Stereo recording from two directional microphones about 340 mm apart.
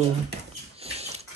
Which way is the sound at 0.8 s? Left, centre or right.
Centre.